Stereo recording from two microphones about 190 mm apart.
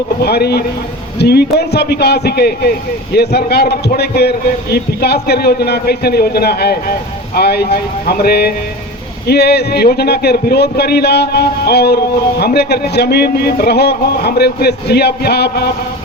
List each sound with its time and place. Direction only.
0.2 s a man's voice: 60° left (ahead or behind)